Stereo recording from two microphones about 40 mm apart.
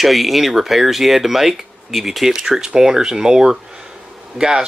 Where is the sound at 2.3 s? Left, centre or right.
Centre.